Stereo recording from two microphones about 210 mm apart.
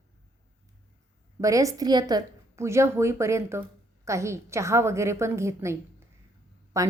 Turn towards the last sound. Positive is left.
turn(degrees=-15)  # may be behind; listen again after turning